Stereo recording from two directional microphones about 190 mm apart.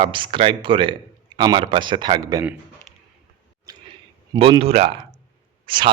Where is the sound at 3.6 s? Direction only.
20° right (ahead or behind).